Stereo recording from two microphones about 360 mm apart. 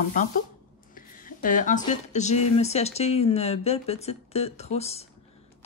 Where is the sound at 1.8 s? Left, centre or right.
Centre.